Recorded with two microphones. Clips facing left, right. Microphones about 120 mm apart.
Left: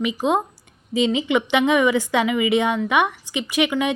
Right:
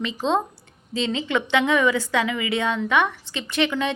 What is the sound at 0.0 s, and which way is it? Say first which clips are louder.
A woman's voice: left 2 dB; 15° left (ahead or behind).